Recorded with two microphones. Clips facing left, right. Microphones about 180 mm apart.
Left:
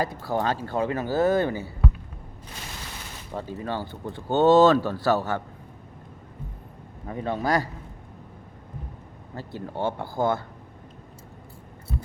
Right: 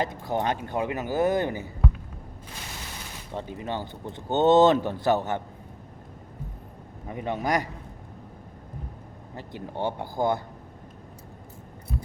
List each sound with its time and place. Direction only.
0.0 s speech: 20° right (ahead or behind)
3.3 s speech: 20° right (ahead or behind)
7.1 s speech: 15° right (ahead or behind)
9.3 s speech: 15° right (ahead or behind)